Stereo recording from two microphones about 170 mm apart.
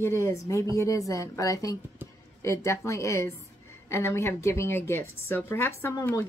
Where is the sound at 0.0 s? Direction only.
15° left (ahead or behind).